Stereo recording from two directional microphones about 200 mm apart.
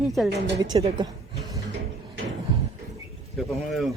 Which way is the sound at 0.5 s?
20° right (ahead or behind).